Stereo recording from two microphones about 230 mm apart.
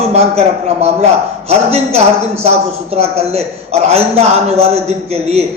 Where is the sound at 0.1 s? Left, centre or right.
Right.